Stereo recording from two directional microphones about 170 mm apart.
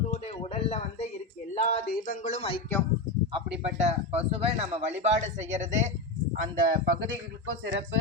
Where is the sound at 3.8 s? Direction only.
40° right (ahead or behind).